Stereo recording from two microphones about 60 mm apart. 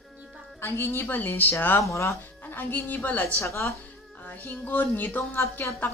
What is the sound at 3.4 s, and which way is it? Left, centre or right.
Speech, left.